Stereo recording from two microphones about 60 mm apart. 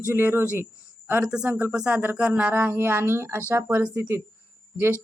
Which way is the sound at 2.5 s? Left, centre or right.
Right.